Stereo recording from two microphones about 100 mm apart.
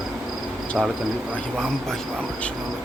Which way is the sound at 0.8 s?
5° right (ahead or behind).